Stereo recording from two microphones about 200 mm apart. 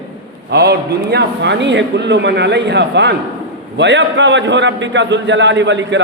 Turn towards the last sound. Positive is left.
turn(degrees=-65)  # may be behind; listen again after turning